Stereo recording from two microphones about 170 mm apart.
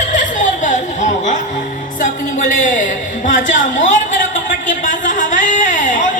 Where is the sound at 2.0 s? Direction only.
50° left (ahead or behind).